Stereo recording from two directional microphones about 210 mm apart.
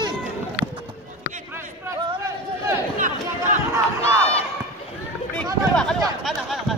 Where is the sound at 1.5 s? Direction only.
15° right (ahead or behind).